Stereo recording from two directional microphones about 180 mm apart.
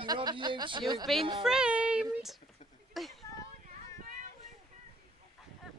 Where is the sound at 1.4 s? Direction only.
5° right (ahead or behind).